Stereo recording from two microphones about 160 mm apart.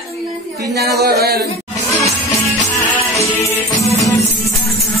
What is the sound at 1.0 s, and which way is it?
Speech, 80° right.